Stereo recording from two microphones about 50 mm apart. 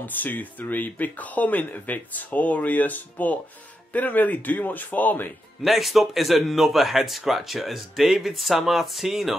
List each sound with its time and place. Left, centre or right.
0.0 s speech: left
5.6 s speech: centre